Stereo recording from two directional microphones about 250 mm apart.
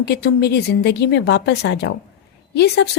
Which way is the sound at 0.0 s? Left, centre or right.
Left.